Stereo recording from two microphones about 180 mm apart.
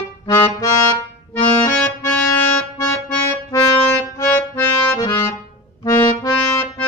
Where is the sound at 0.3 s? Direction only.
20° left (ahead or behind).